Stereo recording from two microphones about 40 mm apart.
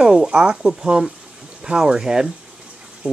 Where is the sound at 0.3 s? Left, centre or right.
Centre.